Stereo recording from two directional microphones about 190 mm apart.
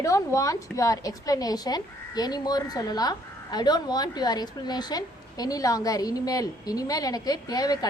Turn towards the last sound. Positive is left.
turn(degrees=20)  # may be behind; listen again after turning